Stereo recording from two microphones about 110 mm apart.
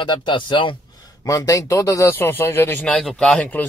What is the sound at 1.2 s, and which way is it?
A man's voice, 30° left (ahead or behind).